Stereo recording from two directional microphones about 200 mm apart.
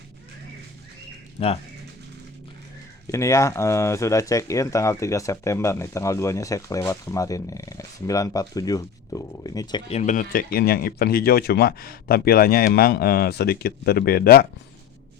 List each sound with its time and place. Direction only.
1.4 s speech: 35° left (ahead or behind)
3.1 s speech: 15° left (ahead or behind)
9.9 s speech: 35° left (ahead or behind)